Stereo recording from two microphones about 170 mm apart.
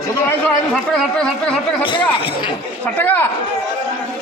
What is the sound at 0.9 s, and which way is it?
Speech, 5° left (ahead or behind).